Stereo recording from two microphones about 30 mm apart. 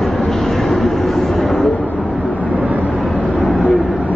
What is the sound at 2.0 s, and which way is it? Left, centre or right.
Vehicle, right.